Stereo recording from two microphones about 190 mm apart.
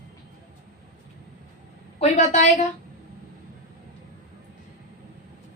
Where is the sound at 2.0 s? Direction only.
35° left (ahead or behind).